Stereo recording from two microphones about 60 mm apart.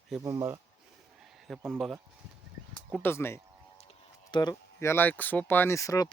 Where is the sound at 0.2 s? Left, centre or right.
Right.